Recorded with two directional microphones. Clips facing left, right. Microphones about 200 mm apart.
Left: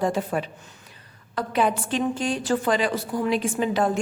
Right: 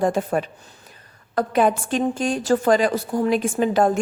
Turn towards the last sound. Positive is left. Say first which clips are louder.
# right 4 dB
turn(degrees=-45)  # may be behind; listen again after turning